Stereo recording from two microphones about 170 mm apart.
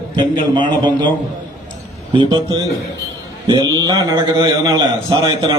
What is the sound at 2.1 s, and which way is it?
A man's voice, 25° right (ahead or behind).